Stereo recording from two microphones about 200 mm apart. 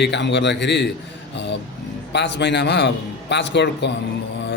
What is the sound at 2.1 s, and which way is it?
A man's voice, 60° left (ahead or behind).